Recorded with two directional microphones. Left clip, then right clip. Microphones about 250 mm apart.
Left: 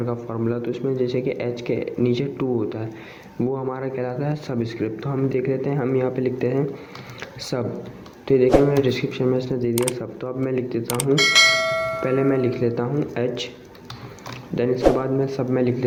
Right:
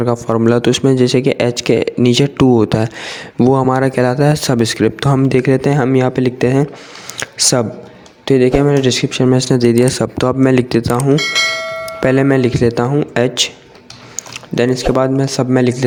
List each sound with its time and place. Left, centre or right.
0.0 s a man's voice: right
11.1 s bell: centre
12.0 s a man's voice: right